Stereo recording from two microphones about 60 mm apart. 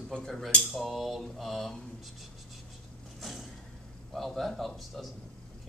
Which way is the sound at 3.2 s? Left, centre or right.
Centre.